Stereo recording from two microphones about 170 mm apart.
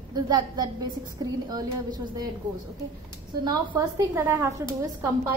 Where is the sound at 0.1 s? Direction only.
25° right (ahead or behind).